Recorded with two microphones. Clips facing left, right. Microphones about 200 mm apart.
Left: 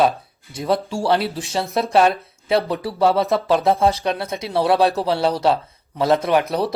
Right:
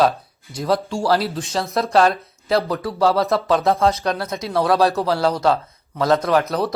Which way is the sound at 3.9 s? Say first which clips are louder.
Even; 30° left (ahead or behind).